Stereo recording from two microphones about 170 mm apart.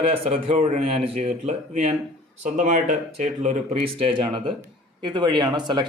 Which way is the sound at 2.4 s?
50° right (ahead or behind).